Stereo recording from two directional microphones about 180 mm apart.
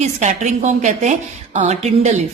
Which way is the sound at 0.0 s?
40° right (ahead or behind).